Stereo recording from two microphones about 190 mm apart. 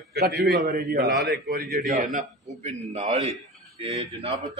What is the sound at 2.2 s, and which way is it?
A man's voice, 40° right (ahead or behind).